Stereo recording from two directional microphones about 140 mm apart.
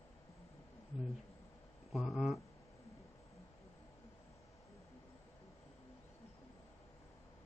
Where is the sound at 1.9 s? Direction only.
Centre (ahead or behind).